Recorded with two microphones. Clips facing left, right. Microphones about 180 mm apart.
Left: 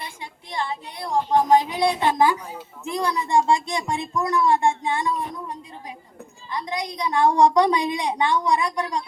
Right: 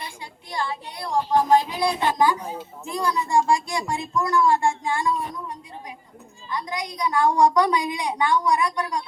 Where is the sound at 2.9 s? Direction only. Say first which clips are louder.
Left 1 dB; 20° left (ahead or behind).